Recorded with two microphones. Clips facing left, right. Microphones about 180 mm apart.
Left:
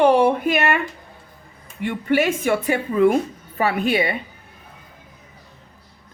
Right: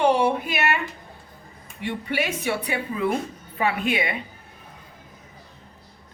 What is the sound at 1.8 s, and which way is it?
A woman's voice, 50° left (ahead or behind).